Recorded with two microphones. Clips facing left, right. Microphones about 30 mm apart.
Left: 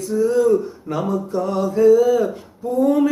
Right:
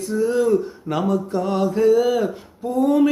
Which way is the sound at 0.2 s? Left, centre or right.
Right.